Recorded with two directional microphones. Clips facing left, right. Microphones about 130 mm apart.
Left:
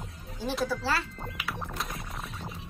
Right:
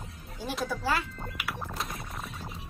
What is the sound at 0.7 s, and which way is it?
Speech, 15° right (ahead or behind).